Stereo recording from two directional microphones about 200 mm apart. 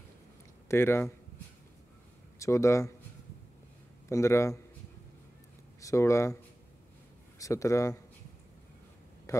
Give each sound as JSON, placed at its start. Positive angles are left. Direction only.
{"t": 0.7, "sound": "speech", "side_deg": 10}
{"t": 2.3, "sound": "speech", "side_deg": 15}
{"t": 4.1, "sound": "speech", "side_deg": 15}
{"t": 5.8, "sound": "speech", "side_deg": 15}
{"t": 7.3, "sound": "speech", "side_deg": 15}
{"t": 9.3, "sound": "a sound", "side_deg": 15}